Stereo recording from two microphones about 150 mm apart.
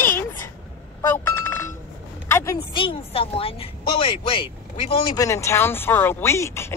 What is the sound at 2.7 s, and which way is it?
A woman's voice, 35° left (ahead or behind).